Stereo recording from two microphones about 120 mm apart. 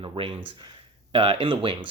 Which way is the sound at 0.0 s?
45° right (ahead or behind).